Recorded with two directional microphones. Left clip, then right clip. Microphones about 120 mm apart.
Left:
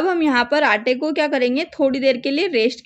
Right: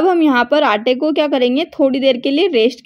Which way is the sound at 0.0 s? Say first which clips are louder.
Right 5 dB; 15° right (ahead or behind).